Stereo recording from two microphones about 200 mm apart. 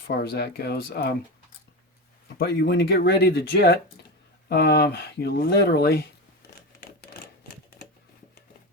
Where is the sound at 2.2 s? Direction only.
50° left (ahead or behind).